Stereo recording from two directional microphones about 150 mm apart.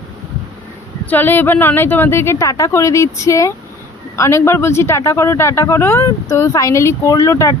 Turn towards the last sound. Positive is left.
turn(degrees=20)  # may be behind; listen again after turning